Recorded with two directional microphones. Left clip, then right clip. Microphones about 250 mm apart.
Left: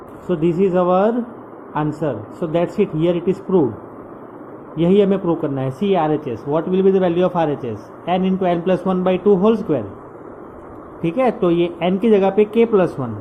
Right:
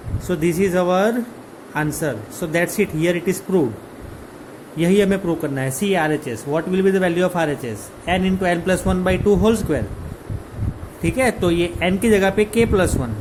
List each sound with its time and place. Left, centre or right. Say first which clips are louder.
0.6 s speech: left 2 dB; centre
4.8 s speech: left 2 dB; centre
11.0 s speech: left 2 dB; centre